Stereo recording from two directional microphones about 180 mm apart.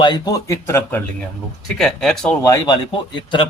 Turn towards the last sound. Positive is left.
turn(degrees=25)  # may be behind; listen again after turning